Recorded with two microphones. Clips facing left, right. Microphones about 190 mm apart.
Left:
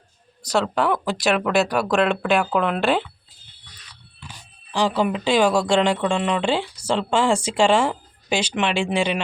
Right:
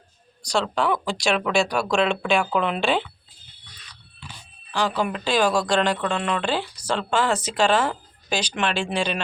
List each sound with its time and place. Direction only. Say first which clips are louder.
0.4 s speech: left 2 dB; 5° left (ahead or behind)
4.7 s speech: left 3 dB; 30° left (ahead or behind)